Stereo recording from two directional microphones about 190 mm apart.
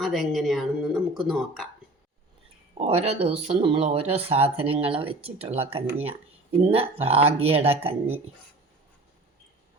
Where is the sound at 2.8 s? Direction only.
35° right (ahead or behind).